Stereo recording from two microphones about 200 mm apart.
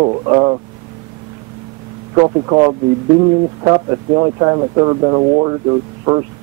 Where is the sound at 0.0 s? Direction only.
25° right (ahead or behind).